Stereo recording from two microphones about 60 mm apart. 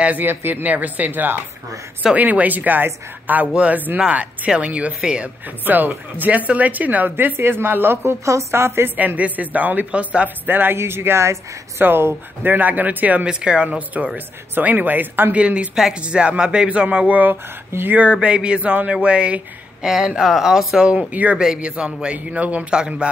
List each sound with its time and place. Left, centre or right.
0.0 s a woman's voice: right; by 5.3 s centre
5.7 s a woman's voice: right
8.5 s a woman's voice: right
8.9 s speech: right
10.4 s a woman's voice: right
15.3 s speech: centre
17.3 s a woman's voice: right
18.1 s speech: centre
20.2 s speech: centre
21.1 s speech: right